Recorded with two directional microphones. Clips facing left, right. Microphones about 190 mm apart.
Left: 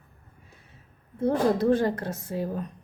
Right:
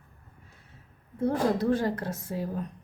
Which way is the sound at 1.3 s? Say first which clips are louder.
Left 4 dB; 25° left (ahead or behind).